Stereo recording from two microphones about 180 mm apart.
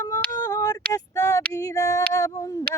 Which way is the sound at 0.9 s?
20° left (ahead or behind).